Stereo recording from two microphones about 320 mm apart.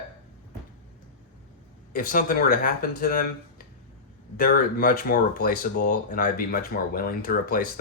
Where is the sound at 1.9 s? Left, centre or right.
Left.